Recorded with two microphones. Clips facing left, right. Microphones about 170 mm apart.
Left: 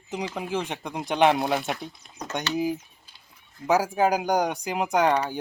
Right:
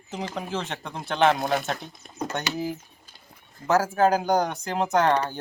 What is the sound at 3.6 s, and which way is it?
Speech, 10° left (ahead or behind).